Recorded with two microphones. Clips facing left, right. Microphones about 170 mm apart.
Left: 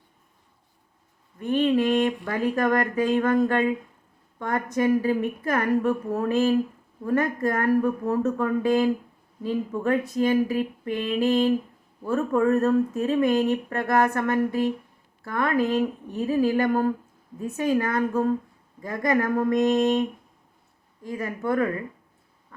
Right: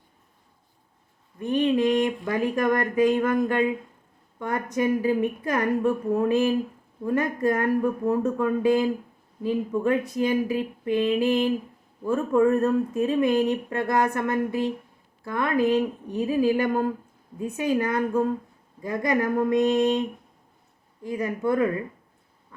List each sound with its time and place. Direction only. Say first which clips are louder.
1.4 s speech: even; 20° right (ahead or behind)